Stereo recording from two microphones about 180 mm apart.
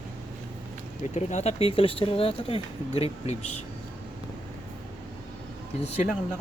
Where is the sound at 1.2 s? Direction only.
40° left (ahead or behind).